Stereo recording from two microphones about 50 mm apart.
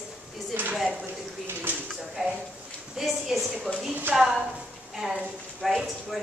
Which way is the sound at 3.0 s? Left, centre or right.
Centre.